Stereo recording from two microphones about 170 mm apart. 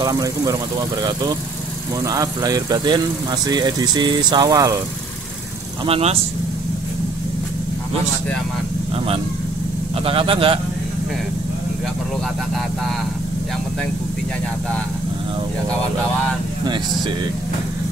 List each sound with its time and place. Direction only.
0.0 s speech: 20° right (ahead or behind)
2.0 s speech: 20° right (ahead or behind)
5.9 s speech: 35° right (ahead or behind)
10.0 s speech: 35° right (ahead or behind)